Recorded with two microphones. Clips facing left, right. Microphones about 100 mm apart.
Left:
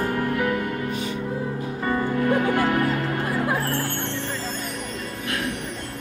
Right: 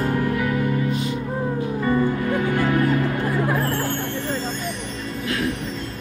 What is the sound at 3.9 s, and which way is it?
Music, 70° left (ahead or behind).